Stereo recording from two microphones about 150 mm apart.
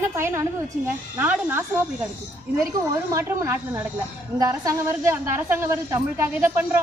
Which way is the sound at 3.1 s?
20° right (ahead or behind).